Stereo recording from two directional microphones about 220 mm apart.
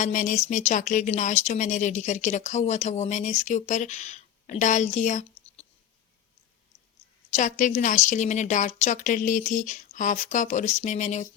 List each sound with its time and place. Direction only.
0.0 s speech: 35° left (ahead or behind)
7.3 s speech: 35° left (ahead or behind)